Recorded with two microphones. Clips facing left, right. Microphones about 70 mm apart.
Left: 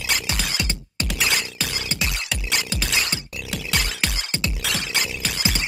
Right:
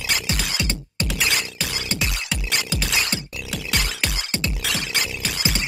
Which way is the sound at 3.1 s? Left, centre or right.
Centre.